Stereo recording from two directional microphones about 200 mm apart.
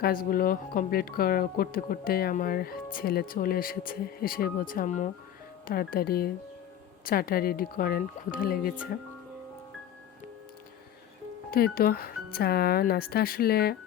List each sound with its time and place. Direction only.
0.0 s speech: 45° left (ahead or behind)
5.6 s speech: 45° left (ahead or behind)
11.5 s speech: 50° left (ahead or behind)